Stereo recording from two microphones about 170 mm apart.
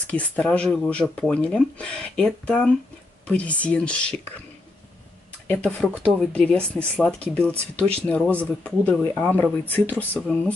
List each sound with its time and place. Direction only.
0.0 s speech: 10° left (ahead or behind)
5.5 s speech: 5° left (ahead or behind)